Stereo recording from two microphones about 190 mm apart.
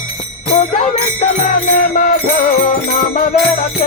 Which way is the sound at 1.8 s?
45° left (ahead or behind).